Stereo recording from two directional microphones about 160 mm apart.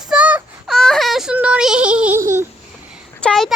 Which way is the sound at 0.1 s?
10° right (ahead or behind).